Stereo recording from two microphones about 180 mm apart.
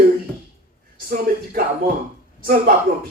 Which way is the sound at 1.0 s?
55° right (ahead or behind).